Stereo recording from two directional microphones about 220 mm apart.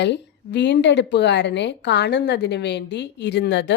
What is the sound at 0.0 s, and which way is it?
A woman's voice, 50° left (ahead or behind).